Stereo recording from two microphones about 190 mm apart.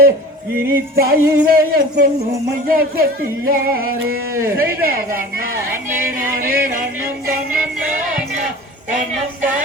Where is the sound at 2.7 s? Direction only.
50° right (ahead or behind).